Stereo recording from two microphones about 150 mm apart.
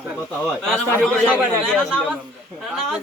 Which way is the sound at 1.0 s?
5° left (ahead or behind).